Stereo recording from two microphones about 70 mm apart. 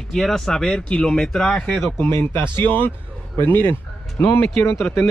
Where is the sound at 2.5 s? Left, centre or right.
Left.